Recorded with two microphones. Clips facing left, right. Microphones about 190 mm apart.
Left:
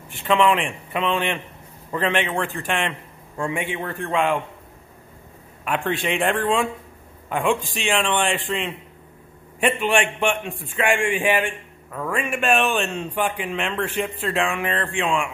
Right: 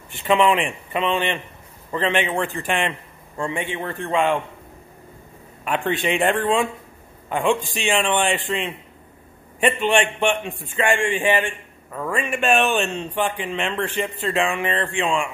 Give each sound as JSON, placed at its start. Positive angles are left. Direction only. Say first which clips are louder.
{"t": 0.1, "sound": "a man's voice", "louder": "right 1 dB", "side_deg": -5}
{"t": 5.7, "sound": "a man's voice", "louder": "right 2 dB", "side_deg": 0}